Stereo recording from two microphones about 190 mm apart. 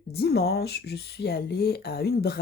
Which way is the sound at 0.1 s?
55° left (ahead or behind).